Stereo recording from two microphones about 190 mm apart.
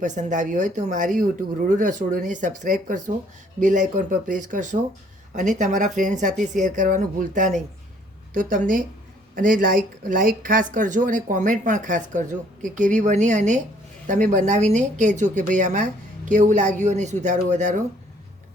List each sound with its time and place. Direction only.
0.0 s speech: 40° right (ahead or behind)